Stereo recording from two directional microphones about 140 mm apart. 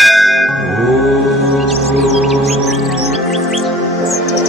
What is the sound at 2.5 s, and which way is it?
Music, centre (ahead or behind).